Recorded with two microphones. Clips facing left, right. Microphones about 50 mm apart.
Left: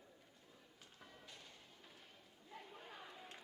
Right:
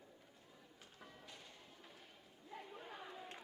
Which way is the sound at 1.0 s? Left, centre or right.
Centre.